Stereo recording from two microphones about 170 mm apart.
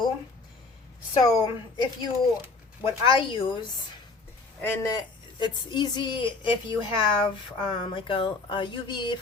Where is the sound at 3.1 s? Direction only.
30° left (ahead or behind).